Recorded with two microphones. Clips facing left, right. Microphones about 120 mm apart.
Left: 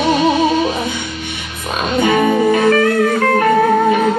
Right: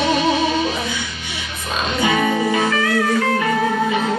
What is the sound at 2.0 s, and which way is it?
Music, 50° left (ahead or behind).